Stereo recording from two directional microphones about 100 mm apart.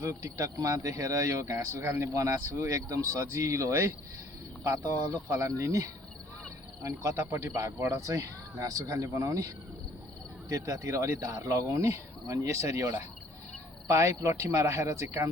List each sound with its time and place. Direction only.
0.0 s speech: 30° right (ahead or behind)
10.5 s speech: 35° right (ahead or behind)